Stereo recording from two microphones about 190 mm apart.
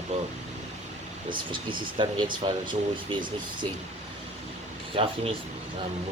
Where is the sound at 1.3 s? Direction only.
25° right (ahead or behind).